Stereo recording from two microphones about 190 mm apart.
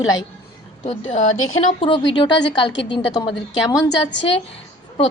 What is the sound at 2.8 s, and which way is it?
Speech, 25° left (ahead or behind).